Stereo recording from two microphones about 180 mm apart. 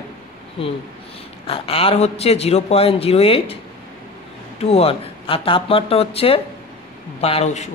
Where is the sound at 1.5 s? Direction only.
30° left (ahead or behind).